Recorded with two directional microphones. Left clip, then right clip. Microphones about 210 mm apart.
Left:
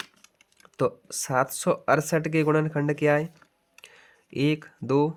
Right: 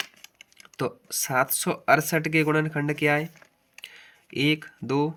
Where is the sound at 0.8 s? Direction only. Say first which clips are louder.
Left 3 dB; 50° left (ahead or behind).